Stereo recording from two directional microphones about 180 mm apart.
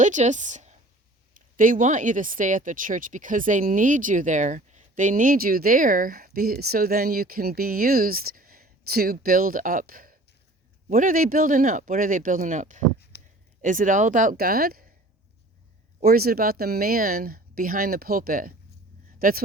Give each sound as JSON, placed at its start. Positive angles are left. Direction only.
{"t": 0.0, "sound": "a woman's voice", "side_deg": -40}
{"t": 13.1, "sound": "a sound", "side_deg": 60}
{"t": 13.6, "sound": "speech", "side_deg": -45}
{"t": 16.0, "sound": "speech", "side_deg": -55}